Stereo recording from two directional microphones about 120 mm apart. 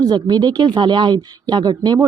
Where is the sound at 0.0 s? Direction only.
35° right (ahead or behind).